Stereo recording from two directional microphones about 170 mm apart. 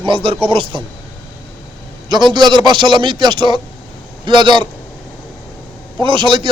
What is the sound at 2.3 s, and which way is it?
A man's voice, 25° right (ahead or behind).